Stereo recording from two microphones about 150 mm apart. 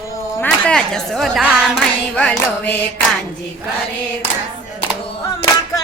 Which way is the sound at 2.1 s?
5° left (ahead or behind).